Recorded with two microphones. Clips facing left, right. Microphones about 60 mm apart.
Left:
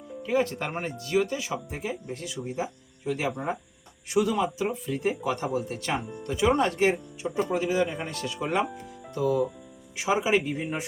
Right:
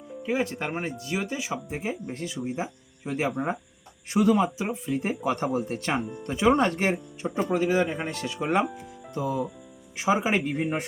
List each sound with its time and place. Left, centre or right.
0.2 s speech: centre
10.0 s speech: right
10.5 s speech: right